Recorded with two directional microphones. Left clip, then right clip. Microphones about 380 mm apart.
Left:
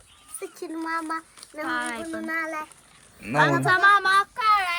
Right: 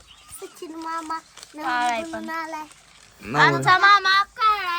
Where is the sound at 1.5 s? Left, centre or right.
Centre.